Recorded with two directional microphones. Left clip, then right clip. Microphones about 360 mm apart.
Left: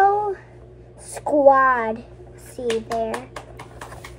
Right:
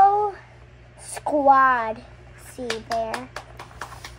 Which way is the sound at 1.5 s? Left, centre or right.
Centre.